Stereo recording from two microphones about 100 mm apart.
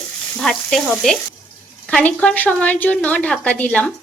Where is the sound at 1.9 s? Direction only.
10° left (ahead or behind).